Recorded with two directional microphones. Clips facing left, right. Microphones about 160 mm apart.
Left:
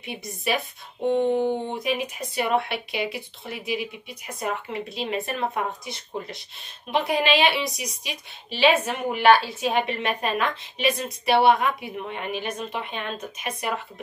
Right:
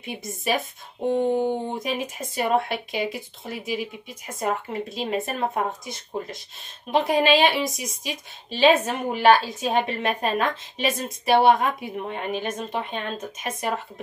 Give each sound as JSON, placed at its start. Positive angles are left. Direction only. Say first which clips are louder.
{"t": 1.3, "sound": "speech", "louder": "even", "side_deg": -15}
{"t": 1.7, "sound": "speech", "louder": "left 1 dB", "side_deg": -40}